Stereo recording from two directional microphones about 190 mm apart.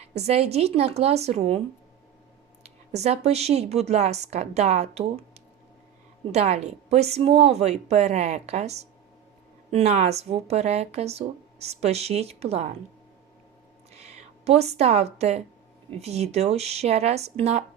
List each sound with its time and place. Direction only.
0.1 s speech: 35° right (ahead or behind)
2.6 s speech: 35° right (ahead or behind)
13.9 s speech: 35° right (ahead or behind)